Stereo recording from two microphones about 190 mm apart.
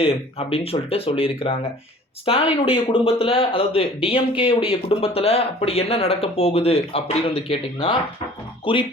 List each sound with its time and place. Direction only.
0.0 s speech: 30° left (ahead or behind)